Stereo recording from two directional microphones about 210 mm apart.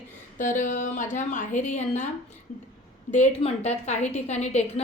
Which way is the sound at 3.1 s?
35° left (ahead or behind).